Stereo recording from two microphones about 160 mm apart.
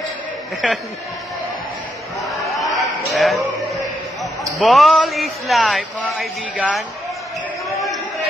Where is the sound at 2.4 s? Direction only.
Centre (ahead or behind).